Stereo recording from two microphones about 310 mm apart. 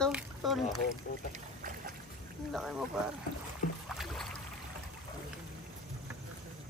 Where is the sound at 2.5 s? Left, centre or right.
Centre.